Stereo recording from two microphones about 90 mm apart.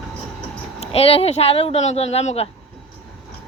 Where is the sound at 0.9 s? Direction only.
90° left.